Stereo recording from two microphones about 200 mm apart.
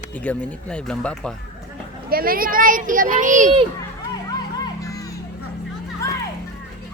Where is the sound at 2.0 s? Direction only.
45° right (ahead or behind).